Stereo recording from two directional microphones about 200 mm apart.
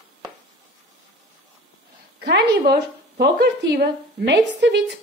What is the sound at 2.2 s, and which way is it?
A woman's voice, 55° right (ahead or behind).